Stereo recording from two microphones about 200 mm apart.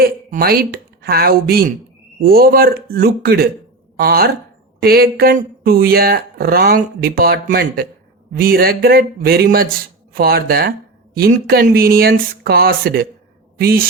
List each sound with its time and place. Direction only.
0.0 s a man's voice: 50° right (ahead or behind)